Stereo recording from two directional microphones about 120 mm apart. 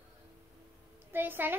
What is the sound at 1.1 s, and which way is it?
Speech, 15° right (ahead or behind).